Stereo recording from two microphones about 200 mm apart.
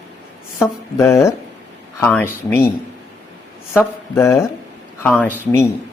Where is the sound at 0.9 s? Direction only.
15° left (ahead or behind).